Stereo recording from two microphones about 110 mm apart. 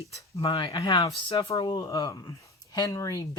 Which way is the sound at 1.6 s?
35° left (ahead or behind).